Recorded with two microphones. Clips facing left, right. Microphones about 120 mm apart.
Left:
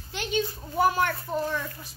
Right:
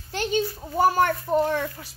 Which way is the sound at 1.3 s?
65° right (ahead or behind).